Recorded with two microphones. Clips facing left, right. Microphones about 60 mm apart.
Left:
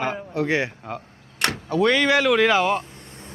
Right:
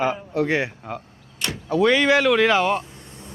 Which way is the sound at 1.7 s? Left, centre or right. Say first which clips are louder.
Right 2 dB; centre.